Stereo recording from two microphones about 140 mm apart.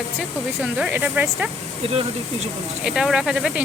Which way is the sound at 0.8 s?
10° right (ahead or behind).